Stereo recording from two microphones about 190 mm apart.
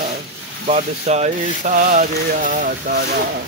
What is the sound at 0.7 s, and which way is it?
Speech, 35° right (ahead or behind).